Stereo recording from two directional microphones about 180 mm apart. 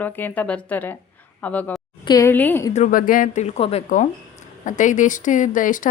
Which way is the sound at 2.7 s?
45° left (ahead or behind).